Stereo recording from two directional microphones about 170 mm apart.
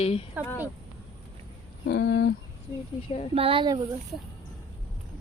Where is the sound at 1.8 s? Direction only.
75° left (ahead or behind).